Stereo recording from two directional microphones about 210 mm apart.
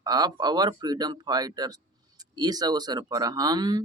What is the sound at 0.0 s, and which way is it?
Speech, 20° right (ahead or behind).